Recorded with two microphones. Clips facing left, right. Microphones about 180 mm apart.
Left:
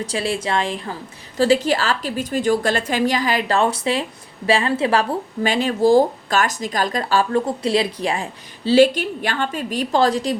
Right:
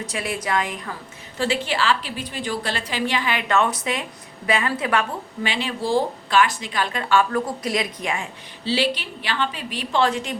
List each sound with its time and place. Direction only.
0.0 s a woman's voice: 30° left (ahead or behind)
1.4 s speech: 40° left (ahead or behind)